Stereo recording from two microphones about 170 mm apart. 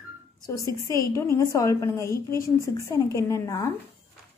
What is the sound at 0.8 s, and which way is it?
A woman's voice, 20° left (ahead or behind).